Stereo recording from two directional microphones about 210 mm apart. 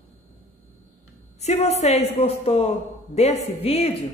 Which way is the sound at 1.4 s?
30° left (ahead or behind).